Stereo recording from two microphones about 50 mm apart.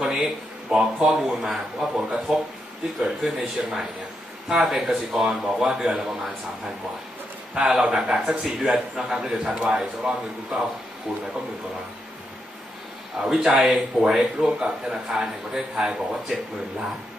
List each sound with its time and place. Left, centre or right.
0.0 s a sound: centre
0.7 s speech: centre
1.2 s speech: centre
5.8 s speech: centre
7.5 s speech: centre
11.1 s speech: centre
13.2 s speech: centre